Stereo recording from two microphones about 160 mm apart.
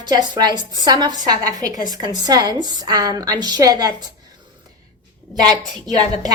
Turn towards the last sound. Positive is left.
turn(degrees=-25)  # may be behind; listen again after turning